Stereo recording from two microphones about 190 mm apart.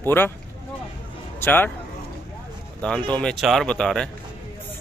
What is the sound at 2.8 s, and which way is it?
A man's voice, 5° left (ahead or behind).